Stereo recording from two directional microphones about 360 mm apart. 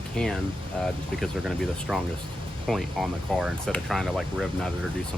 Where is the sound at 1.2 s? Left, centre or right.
Centre.